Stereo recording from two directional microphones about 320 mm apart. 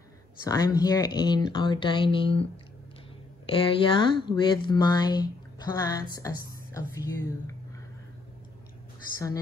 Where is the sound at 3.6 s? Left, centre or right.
Centre.